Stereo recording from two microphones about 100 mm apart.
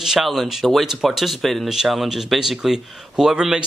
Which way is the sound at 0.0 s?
5° right (ahead or behind).